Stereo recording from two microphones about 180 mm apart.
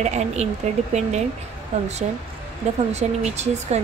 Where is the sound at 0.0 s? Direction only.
40° right (ahead or behind).